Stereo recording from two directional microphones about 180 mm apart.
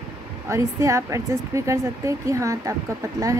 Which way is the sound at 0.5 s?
15° right (ahead or behind).